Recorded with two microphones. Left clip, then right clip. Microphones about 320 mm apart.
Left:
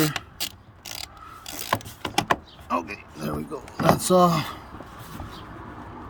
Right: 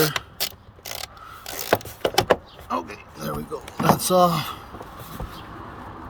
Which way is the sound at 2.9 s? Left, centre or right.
Left.